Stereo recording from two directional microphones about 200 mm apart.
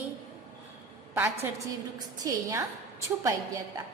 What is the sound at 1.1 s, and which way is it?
A woman's voice, 10° right (ahead or behind).